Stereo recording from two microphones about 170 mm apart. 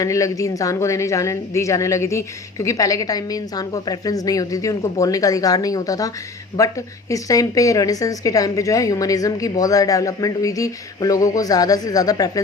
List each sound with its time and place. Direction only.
0.0 s a woman's voice: 20° left (ahead or behind)